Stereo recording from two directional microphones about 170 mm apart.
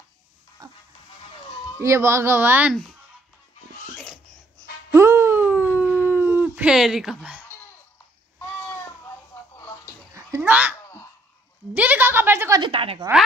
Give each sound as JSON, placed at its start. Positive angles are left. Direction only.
{"t": 0.6, "sound": "goat", "side_deg": -25}
{"t": 1.8, "sound": "speech", "side_deg": -15}
{"t": 4.9, "sound": "dog", "side_deg": -15}
{"t": 9.3, "sound": "music", "side_deg": 15}
{"t": 10.1, "sound": "a sound", "side_deg": -15}
{"t": 12.7, "sound": "a woman's voice", "side_deg": -35}